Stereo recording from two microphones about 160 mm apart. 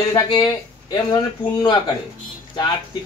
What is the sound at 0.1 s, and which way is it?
Speech, 25° left (ahead or behind).